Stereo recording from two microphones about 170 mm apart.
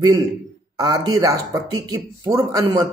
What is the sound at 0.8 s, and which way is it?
A man's voice, 25° right (ahead or behind).